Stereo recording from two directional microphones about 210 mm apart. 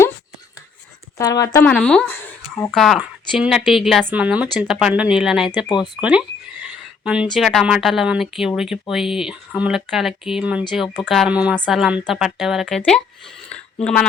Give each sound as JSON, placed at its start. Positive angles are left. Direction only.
{"t": 1.2, "sound": "a woman's voice", "side_deg": 15}
{"t": 1.6, "sound": "speech", "side_deg": 5}
{"t": 5.6, "sound": "speech", "side_deg": 20}
{"t": 6.0, "sound": "a sound", "side_deg": -5}
{"t": 7.3, "sound": "speech", "side_deg": 0}